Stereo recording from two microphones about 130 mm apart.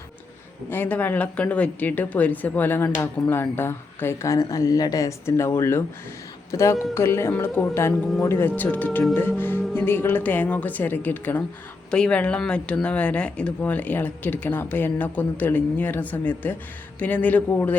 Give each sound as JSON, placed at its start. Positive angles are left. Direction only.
{"t": 0.7, "sound": "speech", "side_deg": 15}